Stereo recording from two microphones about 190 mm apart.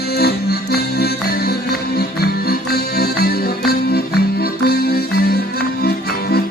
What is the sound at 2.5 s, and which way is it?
Music, 55° left (ahead or behind).